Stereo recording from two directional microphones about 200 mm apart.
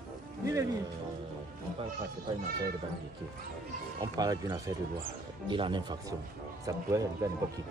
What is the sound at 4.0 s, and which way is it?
A man's voice, 20° right (ahead or behind).